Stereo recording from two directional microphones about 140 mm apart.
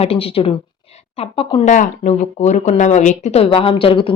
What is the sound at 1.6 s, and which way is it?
Speech, 65° left (ahead or behind).